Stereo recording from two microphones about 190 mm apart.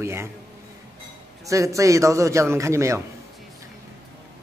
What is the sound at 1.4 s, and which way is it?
Speech, 15° right (ahead or behind).